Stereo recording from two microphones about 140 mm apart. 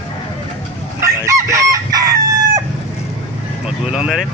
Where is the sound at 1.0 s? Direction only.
20° right (ahead or behind).